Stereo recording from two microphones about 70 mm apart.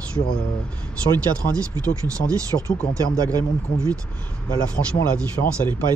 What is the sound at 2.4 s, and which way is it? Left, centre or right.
Speech, right.